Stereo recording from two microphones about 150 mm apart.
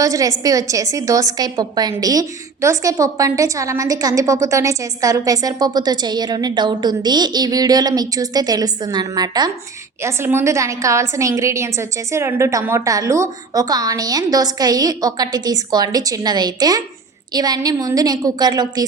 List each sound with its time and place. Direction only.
0.0 s a woman's voice: 20° right (ahead or behind)